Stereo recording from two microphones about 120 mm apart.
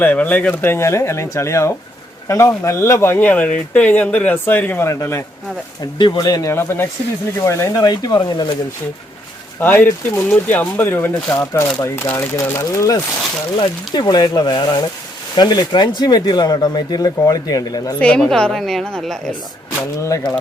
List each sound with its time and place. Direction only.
0.0 s speech: 15° left (ahead or behind)
5.8 s speech: 35° left (ahead or behind)
6.5 s speech: 20° left (ahead or behind)
9.6 s speech: 15° left (ahead or behind)
13.6 s speech: 35° left (ahead or behind)
18.0 s a woman's voice: 5° left (ahead or behind)